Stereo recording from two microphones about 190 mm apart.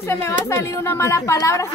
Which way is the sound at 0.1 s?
15° left (ahead or behind).